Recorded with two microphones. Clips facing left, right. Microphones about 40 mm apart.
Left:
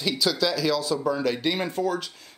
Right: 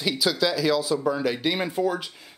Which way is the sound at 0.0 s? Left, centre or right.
Centre.